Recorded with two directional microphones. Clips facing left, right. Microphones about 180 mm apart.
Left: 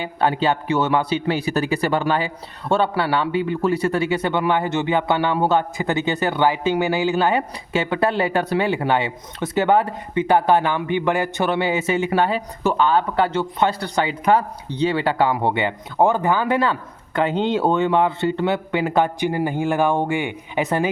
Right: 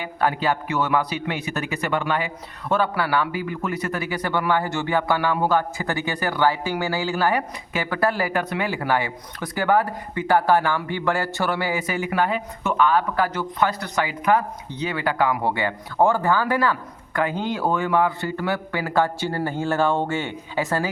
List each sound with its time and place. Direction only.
0.0 s a man's voice: 25° left (ahead or behind)